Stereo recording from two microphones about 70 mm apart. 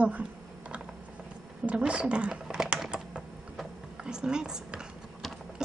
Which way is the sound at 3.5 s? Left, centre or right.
Centre.